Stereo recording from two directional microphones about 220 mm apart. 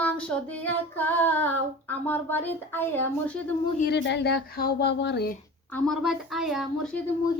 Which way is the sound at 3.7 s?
50° left (ahead or behind).